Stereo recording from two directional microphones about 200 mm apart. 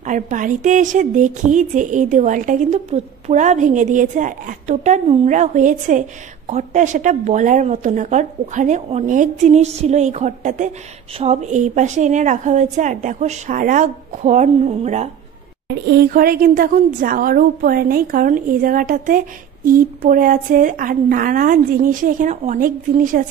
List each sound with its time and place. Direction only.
0.0 s a woman's voice: 40° right (ahead or behind)
15.7 s a woman's voice: 50° right (ahead or behind)